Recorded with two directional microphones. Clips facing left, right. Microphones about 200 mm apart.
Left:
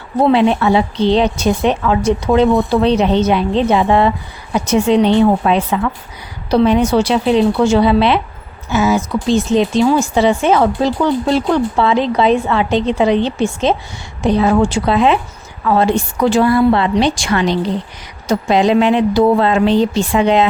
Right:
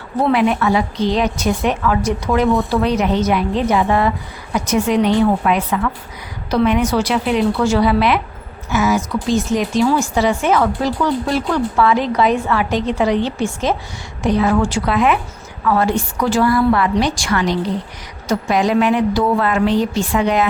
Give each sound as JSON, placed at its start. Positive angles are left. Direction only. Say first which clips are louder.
{"t": 0.3, "sound": "speech", "louder": "left 3 dB", "side_deg": 25}